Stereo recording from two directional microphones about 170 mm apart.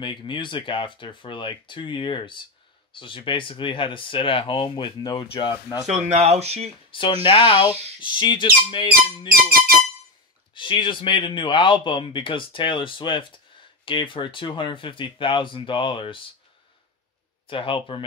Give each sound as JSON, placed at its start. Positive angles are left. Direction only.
{"t": 0.0, "sound": "speech", "side_deg": 30}
{"t": 5.9, "sound": "speech", "side_deg": -40}
{"t": 6.9, "sound": "speech", "side_deg": 30}
{"t": 9.3, "sound": "music", "side_deg": -60}
{"t": 10.5, "sound": "speech", "side_deg": 30}
{"t": 17.5, "sound": "speech", "side_deg": 30}